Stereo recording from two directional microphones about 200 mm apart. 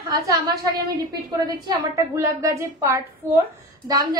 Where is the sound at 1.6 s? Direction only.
15° right (ahead or behind).